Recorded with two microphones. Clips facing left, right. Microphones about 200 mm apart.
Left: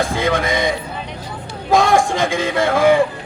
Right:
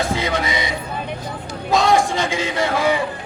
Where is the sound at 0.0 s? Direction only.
50° left (ahead or behind).